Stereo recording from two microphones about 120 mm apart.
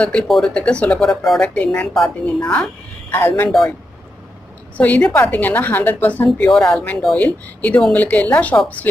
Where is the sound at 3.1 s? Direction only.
20° left (ahead or behind).